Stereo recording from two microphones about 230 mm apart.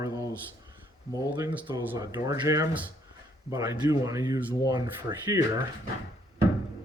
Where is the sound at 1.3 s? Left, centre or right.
Centre.